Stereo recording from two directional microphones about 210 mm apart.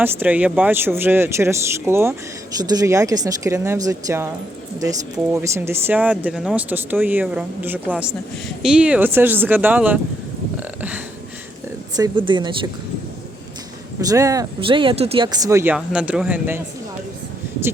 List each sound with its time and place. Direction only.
0.0 s speech: 10° right (ahead or behind)
10.6 s a sound: 5° right (ahead or behind)
11.9 s speech: 20° right (ahead or behind)
14.0 s speech: 15° right (ahead or behind)